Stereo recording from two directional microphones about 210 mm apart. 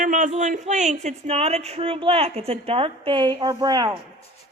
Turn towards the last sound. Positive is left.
turn(degrees=-20)  # may be behind; listen again after turning